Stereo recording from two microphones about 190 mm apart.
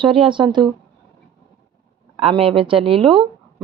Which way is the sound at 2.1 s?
30° right (ahead or behind).